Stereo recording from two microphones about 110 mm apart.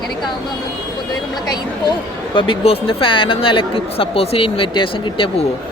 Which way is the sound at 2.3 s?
55° left (ahead or behind).